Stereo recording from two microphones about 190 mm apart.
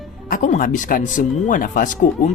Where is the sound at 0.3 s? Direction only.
45° left (ahead or behind).